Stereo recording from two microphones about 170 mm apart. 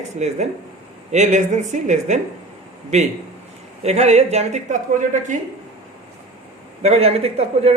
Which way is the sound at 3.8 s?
40° right (ahead or behind).